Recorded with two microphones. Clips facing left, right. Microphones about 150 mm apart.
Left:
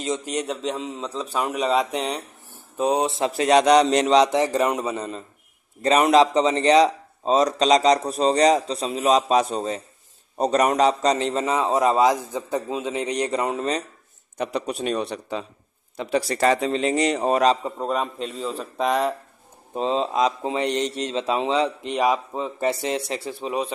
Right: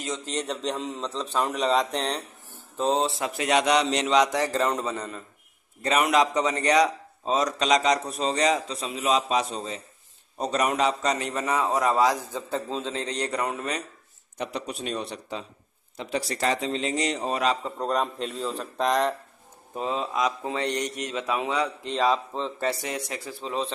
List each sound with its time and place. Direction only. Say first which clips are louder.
0.0 s a man's voice: left 5 dB; 15° left (ahead or behind)
3.2 s a man's voice: left 6 dB; 35° left (ahead or behind)
4.2 s a man's voice: left 4 dB; 20° left (ahead or behind)
5.8 s a man's voice: left 6 dB; 35° left (ahead or behind)
14.4 s a man's voice: left 6 dB; 60° left (ahead or behind)
17.7 s a man's voice: left 1 dB; 5° left (ahead or behind)
19.7 s a man's voice: left 6 dB; 25° left (ahead or behind)
21.9 s a man's voice: left 1 dB; 15° left (ahead or behind)
22.7 s a man's voice: left 5 dB; 25° left (ahead or behind)
23.4 s a man's voice: left 2 dB; 15° left (ahead or behind)